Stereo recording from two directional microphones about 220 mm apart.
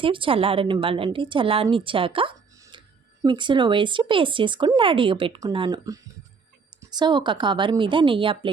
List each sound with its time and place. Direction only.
0.0 s speech: 25° right (ahead or behind)